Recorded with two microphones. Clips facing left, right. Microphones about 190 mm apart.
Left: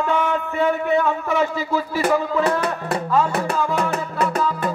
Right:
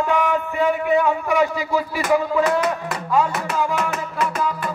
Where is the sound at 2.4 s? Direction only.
35° left (ahead or behind).